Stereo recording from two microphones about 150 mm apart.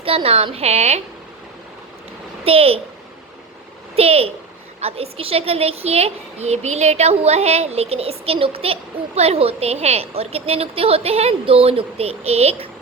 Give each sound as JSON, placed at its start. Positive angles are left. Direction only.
{"t": 0.0, "sound": "a woman's voice", "side_deg": -40}
{"t": 2.4, "sound": "a child's voice", "side_deg": -40}
{"t": 3.9, "sound": "a woman's voice", "side_deg": -40}